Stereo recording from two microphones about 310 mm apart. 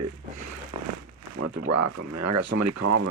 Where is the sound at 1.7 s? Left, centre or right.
Right.